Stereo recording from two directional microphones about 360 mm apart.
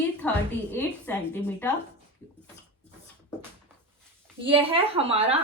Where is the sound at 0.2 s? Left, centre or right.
Centre.